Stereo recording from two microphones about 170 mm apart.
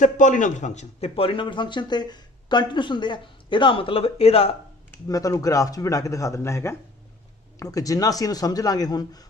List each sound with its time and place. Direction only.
0.0 s a man's voice: 50° left (ahead or behind)
5.0 s speech: 20° left (ahead or behind)